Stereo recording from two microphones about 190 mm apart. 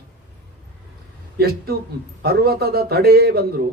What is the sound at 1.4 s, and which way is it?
Speech, 55° right (ahead or behind).